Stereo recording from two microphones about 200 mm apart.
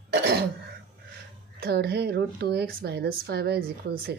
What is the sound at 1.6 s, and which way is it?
A woman's voice, 55° right (ahead or behind).